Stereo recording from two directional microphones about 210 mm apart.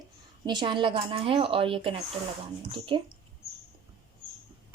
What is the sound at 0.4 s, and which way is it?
Speech, 20° right (ahead or behind).